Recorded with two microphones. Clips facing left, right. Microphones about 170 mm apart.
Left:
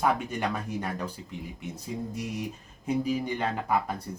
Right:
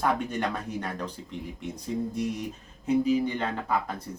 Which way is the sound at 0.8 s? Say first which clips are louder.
Even; 10° left (ahead or behind).